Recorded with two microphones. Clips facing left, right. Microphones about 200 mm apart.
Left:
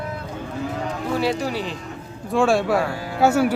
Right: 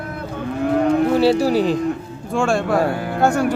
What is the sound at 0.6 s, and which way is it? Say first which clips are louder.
Livestock: right 12 dB; 60° right (ahead or behind).